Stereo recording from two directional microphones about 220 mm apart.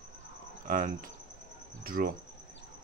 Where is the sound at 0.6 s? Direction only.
40° right (ahead or behind).